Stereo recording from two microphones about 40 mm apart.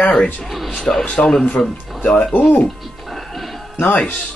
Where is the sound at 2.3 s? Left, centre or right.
Left.